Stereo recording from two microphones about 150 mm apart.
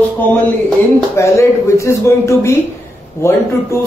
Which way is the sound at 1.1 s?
20° left (ahead or behind).